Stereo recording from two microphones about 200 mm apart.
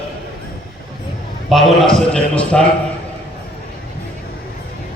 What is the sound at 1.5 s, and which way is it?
A man's voice, centre (ahead or behind).